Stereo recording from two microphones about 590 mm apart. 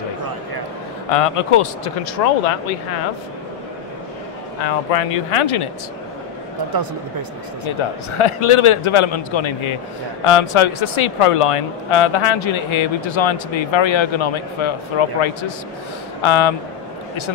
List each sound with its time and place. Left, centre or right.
1.1 s speech: left
2.2 s speech: left
4.9 s speech: left
6.7 s speech: right
8.2 s speech: left